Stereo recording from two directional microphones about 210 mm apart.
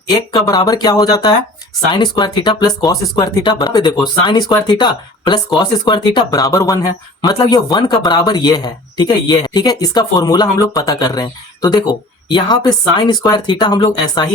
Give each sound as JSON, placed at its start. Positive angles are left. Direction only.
{"t": 0.3, "sound": "speech", "side_deg": 20}